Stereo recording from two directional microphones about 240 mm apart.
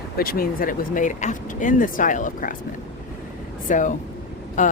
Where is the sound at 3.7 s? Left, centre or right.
Left.